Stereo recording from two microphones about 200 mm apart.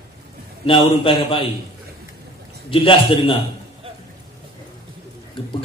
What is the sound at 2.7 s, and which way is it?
Mantra, 25° left (ahead or behind).